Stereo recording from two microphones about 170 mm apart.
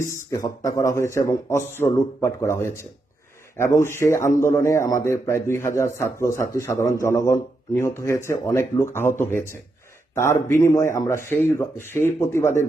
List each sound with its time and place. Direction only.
0.1 s a man's voice: 20° left (ahead or behind)